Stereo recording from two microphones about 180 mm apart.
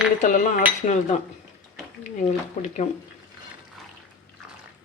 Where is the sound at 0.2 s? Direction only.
45° left (ahead or behind).